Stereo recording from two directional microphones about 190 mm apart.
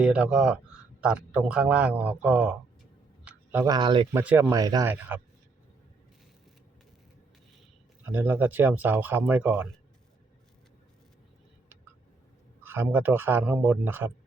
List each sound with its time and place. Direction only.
0.0 s speech: 5° right (ahead or behind)
3.2 s a sound: 10° right (ahead or behind)
3.7 s speech: 25° right (ahead or behind)
4.1 s speech: 10° right (ahead or behind)
8.1 s speech: 10° right (ahead or behind)
12.6 s speech: 10° right (ahead or behind)